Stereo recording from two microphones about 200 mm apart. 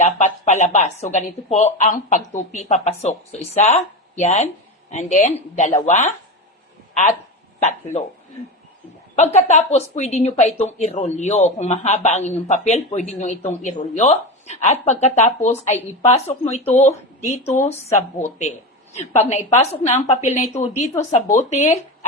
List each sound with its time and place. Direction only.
0.0 s speech: 35° left (ahead or behind)
7.6 s speech: 35° left (ahead or behind)
9.1 s speech: 35° left (ahead or behind)